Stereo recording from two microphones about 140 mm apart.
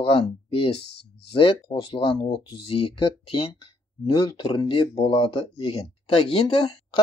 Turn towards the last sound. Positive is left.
turn(degrees=40)  # may be behind; listen again after turning